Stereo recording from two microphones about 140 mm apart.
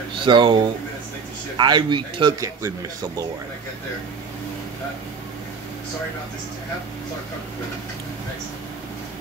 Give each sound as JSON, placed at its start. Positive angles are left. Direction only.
{"t": 0.2, "sound": "speech", "side_deg": -35}